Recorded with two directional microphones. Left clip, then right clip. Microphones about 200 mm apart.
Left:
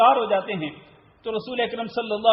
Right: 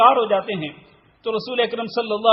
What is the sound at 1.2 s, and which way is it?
A man's voice, 30° right (ahead or behind).